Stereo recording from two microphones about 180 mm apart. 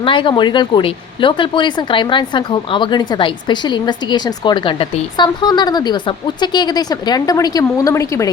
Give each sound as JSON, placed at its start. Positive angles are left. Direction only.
{"t": 0.0, "sound": "speech", "side_deg": 30}